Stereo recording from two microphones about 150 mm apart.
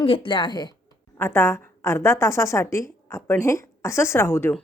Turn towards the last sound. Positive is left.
turn(degrees=15)  # may be behind; listen again after turning